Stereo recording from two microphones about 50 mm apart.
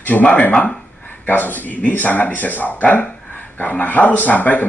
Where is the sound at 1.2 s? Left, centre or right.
Left.